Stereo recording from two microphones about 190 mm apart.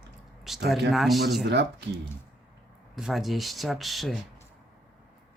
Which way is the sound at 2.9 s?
Centre (ahead or behind).